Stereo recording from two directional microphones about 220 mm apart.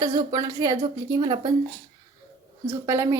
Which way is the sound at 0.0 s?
20° right (ahead or behind).